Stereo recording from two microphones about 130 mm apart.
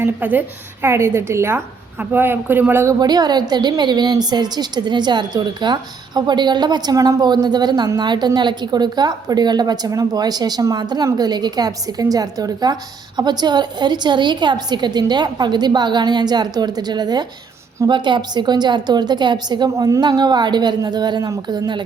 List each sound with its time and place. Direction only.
0.0 s speech: 15° right (ahead or behind)
3.0 s a woman's voice: 30° right (ahead or behind)